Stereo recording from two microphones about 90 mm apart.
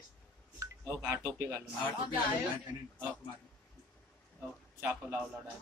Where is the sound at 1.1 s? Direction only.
30° right (ahead or behind).